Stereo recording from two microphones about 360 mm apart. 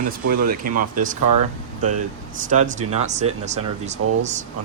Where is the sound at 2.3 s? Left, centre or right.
Right.